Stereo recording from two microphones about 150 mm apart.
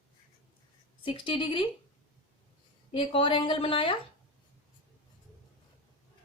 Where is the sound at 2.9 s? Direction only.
35° left (ahead or behind).